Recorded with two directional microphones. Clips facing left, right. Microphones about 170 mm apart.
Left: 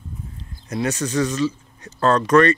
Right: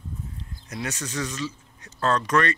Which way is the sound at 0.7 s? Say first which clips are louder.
Left 9 dB; 30° left (ahead or behind).